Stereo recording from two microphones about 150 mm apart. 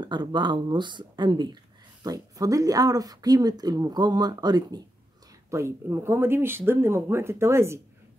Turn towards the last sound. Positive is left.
turn(degrees=-20)  # may be behind; listen again after turning